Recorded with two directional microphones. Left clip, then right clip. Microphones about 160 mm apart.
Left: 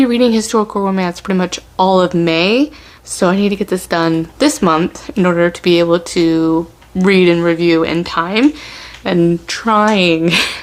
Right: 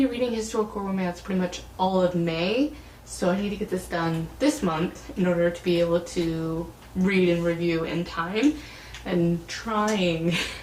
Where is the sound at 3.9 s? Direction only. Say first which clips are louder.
Left 14 dB; 40° left (ahead or behind).